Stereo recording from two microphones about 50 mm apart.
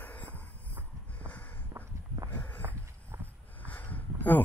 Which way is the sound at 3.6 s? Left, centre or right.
Left.